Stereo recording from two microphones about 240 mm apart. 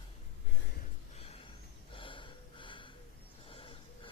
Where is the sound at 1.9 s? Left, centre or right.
Left.